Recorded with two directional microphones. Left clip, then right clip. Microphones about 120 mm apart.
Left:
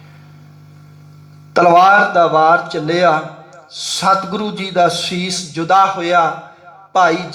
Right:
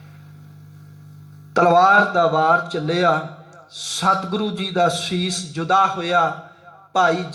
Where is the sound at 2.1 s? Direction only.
40° left (ahead or behind); by 2.8 s 20° left (ahead or behind).